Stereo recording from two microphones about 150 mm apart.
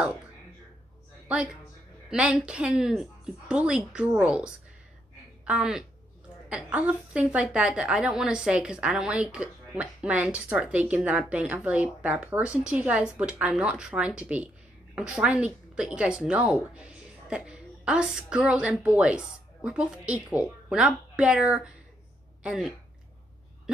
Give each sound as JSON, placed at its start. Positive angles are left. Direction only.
{"t": 1.3, "sound": "a woman's voice", "side_deg": -5}